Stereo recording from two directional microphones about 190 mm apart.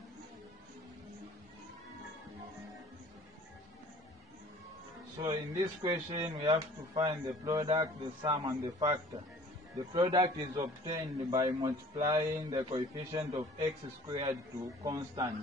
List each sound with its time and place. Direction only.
5.2 s speech: 20° right (ahead or behind)